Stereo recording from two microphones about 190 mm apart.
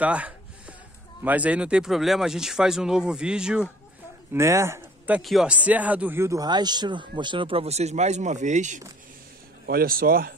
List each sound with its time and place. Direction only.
0.0 s a sound: 5° right (ahead or behind)
1.2 s speech: 10° right (ahead or behind); by 8.8 s 40° right (ahead or behind)
9.7 s speech: 50° right (ahead or behind)